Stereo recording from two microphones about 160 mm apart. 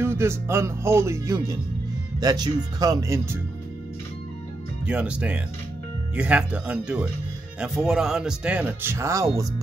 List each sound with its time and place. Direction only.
0.0 s speech: 15° right (ahead or behind)
4.8 s speech: 10° right (ahead or behind)